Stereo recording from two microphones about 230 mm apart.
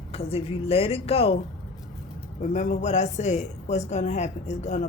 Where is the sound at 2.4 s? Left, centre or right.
Left.